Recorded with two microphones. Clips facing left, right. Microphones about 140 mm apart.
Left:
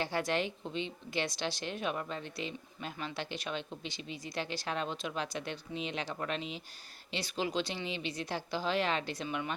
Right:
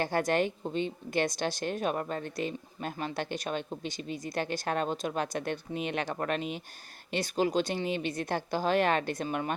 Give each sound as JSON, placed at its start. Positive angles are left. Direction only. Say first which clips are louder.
{"t": 0.0, "sound": "a woman's voice", "louder": "right 5 dB", "side_deg": -50}